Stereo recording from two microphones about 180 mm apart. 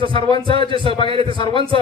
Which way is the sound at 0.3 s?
25° left (ahead or behind).